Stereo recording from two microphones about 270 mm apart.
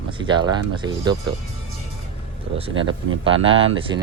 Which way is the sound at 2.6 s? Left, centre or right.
Centre.